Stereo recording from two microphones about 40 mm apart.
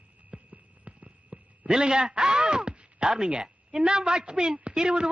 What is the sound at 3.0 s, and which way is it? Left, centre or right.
A woman's voice, right.